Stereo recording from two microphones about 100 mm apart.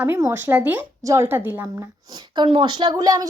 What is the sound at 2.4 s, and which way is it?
Speech, 60° right (ahead or behind).